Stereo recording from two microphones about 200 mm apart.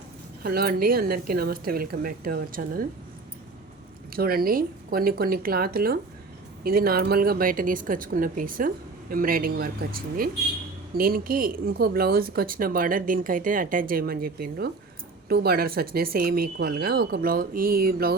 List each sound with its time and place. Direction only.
0.4 s speech: 50° right (ahead or behind)
4.1 s speech: 50° right (ahead or behind)